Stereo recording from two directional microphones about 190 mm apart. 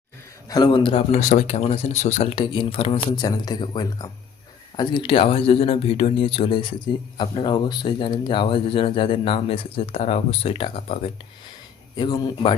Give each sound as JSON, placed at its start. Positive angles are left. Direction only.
{"t": 0.4, "sound": "speech", "side_deg": 20}
{"t": 3.2, "sound": "speech", "side_deg": 20}